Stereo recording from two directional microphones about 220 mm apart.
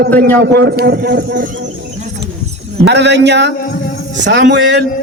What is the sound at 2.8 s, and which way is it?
A man's voice, 50° right (ahead or behind).